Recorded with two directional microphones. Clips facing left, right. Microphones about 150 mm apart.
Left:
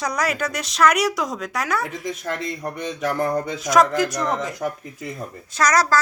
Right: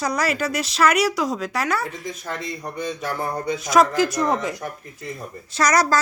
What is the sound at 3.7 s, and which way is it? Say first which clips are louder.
Speech: even; 5° right (ahead or behind).